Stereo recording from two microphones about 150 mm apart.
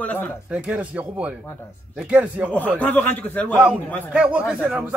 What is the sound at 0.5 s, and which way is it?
Speech, 10° right (ahead or behind).